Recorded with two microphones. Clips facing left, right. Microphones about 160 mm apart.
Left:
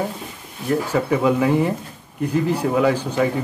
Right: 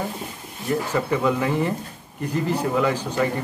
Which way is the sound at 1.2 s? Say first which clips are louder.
Left 4 dB; 10° left (ahead or behind).